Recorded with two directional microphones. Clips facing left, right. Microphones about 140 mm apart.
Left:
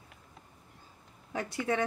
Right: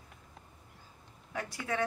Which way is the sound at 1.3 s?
25° left (ahead or behind).